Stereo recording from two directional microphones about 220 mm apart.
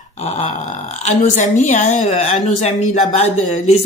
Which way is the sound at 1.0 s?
35° left (ahead or behind).